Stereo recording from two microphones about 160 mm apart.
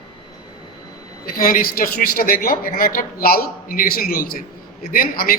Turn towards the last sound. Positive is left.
turn(degrees=65)  # may be behind; listen again after turning